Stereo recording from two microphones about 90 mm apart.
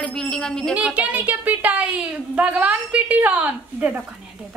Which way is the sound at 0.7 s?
15° right (ahead or behind).